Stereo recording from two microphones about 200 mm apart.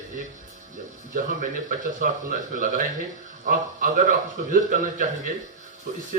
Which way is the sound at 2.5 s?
40° right (ahead or behind).